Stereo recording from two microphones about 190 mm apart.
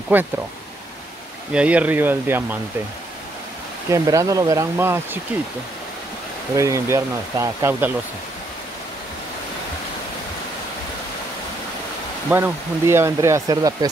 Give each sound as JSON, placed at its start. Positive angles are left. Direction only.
{"t": 0.1, "sound": "speech", "side_deg": -10}
{"t": 1.5, "sound": "speech", "side_deg": -5}
{"t": 3.9, "sound": "speech", "side_deg": -15}
{"t": 6.5, "sound": "speech", "side_deg": -15}
{"t": 12.3, "sound": "speech", "side_deg": -10}